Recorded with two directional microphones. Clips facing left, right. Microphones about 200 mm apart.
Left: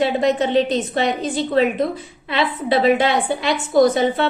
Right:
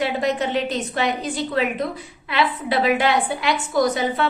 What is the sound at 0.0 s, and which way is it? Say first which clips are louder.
A woman's voice: left 4 dB; 25° left (ahead or behind).